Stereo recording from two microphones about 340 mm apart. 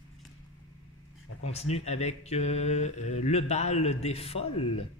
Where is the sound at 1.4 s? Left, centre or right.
Centre.